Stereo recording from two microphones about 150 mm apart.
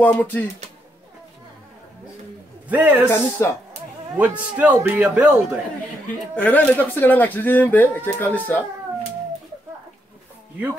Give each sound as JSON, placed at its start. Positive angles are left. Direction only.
{"t": 0.0, "sound": "speech", "side_deg": 15}
{"t": 2.7, "sound": "a man's voice", "side_deg": -10}
{"t": 3.1, "sound": "speech", "side_deg": 15}
{"t": 4.2, "sound": "a man's voice", "side_deg": -10}
{"t": 6.3, "sound": "speech", "side_deg": 10}